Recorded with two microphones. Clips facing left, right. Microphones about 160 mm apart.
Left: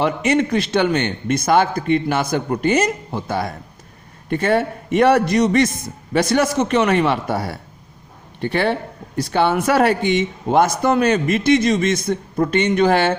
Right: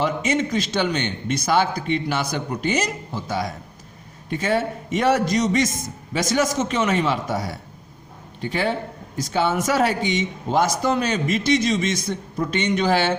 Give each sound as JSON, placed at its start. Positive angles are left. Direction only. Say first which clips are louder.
{"t": 0.0, "sound": "a man's voice", "louder": "left 4 dB", "side_deg": 60}